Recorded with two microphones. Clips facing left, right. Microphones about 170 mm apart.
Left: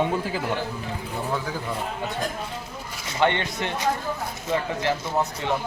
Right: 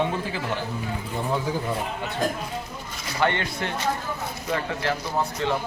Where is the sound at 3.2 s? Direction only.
20° left (ahead or behind).